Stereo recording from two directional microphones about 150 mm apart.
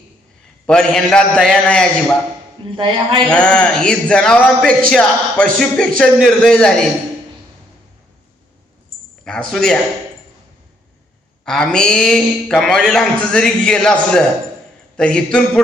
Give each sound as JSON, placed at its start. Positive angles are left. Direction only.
{"t": 0.7, "sound": "a man's voice", "side_deg": 5}
{"t": 2.7, "sound": "speech", "side_deg": -35}
{"t": 3.2, "sound": "a man's voice", "side_deg": 5}
{"t": 9.5, "sound": "a man's voice", "side_deg": 5}
{"t": 11.4, "sound": "a man's voice", "side_deg": 5}